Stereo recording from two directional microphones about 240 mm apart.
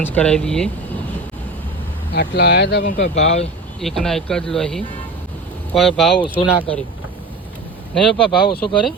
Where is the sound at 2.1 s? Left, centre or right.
Left.